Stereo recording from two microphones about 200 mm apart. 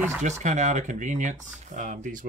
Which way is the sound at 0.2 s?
35° right (ahead or behind).